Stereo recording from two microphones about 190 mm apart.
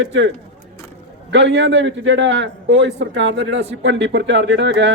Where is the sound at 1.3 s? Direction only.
65° right (ahead or behind).